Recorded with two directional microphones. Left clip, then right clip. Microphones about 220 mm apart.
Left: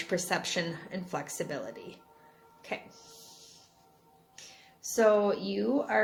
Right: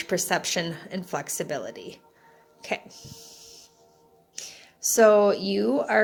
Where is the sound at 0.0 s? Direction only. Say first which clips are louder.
Right 5 dB; 30° right (ahead or behind).